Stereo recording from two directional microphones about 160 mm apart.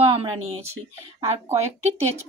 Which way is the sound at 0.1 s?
35° right (ahead or behind).